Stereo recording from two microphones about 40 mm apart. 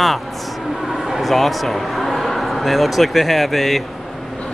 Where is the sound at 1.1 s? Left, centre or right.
Centre.